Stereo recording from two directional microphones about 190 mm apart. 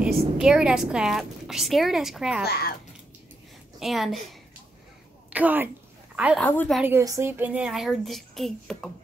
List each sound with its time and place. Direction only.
0.0 s a woman's voice: 5° right (ahead or behind)
2.4 s a child's voice: 55° left (ahead or behind)
3.8 s a woman's voice: centre (ahead or behind)
6.4 s speech: 10° left (ahead or behind)
6.8 s a woman's voice: 15° right (ahead or behind); by 8.9 s centre (ahead or behind)